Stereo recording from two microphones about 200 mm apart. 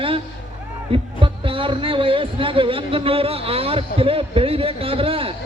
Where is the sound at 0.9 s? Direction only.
25° right (ahead or behind).